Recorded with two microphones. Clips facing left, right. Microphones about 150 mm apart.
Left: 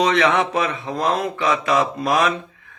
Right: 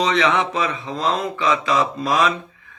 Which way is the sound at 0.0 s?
60° left (ahead or behind).